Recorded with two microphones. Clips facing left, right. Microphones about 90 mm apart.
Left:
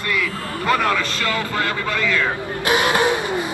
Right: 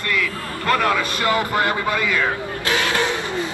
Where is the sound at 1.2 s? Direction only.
20° right (ahead or behind).